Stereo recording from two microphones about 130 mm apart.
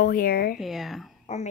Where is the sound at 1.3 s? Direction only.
55° left (ahead or behind).